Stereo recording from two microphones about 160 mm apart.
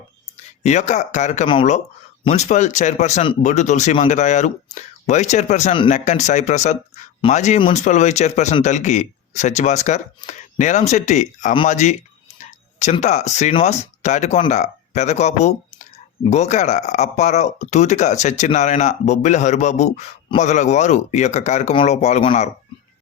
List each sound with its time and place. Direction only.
0.6 s speech: 45° left (ahead or behind)